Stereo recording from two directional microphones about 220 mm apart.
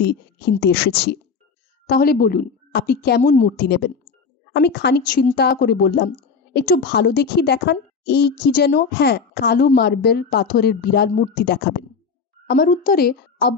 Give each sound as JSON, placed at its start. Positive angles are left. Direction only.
{"t": 0.1, "sound": "a woman's voice", "side_deg": 50}
{"t": 3.2, "sound": "a woman's voice", "side_deg": 35}
{"t": 3.6, "sound": "a woman's voice", "side_deg": 50}